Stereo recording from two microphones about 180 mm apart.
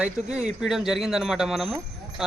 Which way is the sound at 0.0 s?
5° right (ahead or behind).